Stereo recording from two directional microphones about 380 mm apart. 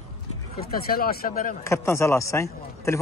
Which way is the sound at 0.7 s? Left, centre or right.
Left.